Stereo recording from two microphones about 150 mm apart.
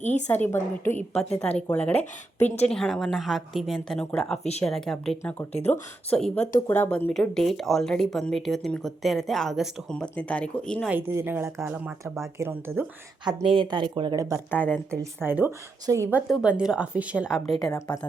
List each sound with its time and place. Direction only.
0.0 s a woman's voice: 50° left (ahead or behind)
0.3 s a woman's voice: 15° left (ahead or behind)
1.9 s a woman's voice: 45° left (ahead or behind)
2.6 s speech: 5° left (ahead or behind)
5.5 s a woman's voice: 45° left (ahead or behind)
6.1 s speech: 5° left (ahead or behind)
6.7 s a woman's voice: 15° left (ahead or behind)
7.1 s speech: 5° left (ahead or behind)
10.8 s speech: 15° right (ahead or behind)
11.5 s speech: 5° right (ahead or behind)
12.4 s speech: 15° right (ahead or behind)
13.2 s speech: 35° right (ahead or behind)
14.5 s a woman's voice: 10° left (ahead or behind)
15.2 s speech: 15° right (ahead or behind)